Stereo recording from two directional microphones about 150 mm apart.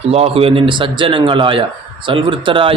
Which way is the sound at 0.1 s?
40° right (ahead or behind).